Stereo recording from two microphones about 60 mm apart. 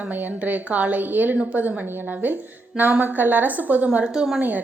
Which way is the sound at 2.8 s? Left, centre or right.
Right.